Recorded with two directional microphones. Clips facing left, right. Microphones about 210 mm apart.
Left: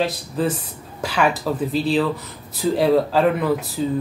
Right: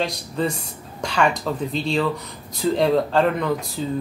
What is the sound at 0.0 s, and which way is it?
Speech, 5° left (ahead or behind).